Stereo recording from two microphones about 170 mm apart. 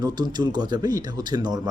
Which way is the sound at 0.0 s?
25° right (ahead or behind).